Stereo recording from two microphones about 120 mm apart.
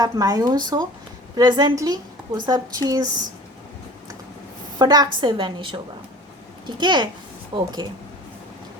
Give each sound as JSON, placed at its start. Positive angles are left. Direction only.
{"t": 0.0, "sound": "a woman's voice", "side_deg": -30}
{"t": 4.8, "sound": "a woman's voice", "side_deg": -35}